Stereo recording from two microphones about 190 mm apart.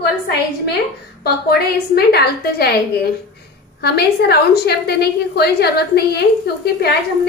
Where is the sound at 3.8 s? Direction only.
60° left (ahead or behind).